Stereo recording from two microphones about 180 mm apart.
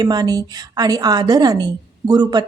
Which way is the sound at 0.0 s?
20° right (ahead or behind).